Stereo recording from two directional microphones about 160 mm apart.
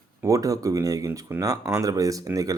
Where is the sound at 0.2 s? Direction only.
20° right (ahead or behind).